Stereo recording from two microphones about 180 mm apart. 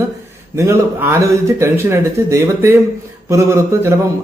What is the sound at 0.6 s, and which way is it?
Speech, 15° right (ahead or behind).